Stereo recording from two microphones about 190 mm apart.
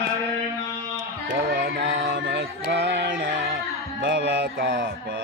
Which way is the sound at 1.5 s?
55° right (ahead or behind).